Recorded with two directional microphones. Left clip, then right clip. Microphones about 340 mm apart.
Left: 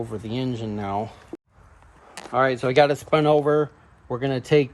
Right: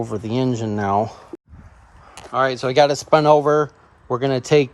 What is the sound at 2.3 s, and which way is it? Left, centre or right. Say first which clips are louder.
Speech: right 2 dB; centre.